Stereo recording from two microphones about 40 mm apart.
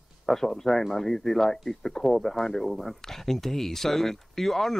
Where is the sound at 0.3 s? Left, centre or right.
Centre.